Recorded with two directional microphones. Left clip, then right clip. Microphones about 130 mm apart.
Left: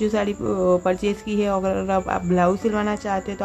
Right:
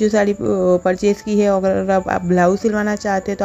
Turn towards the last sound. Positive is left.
turn(degrees=-35)  # may be behind; listen again after turning